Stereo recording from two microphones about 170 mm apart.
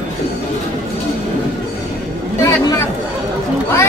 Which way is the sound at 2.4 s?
20° left (ahead or behind).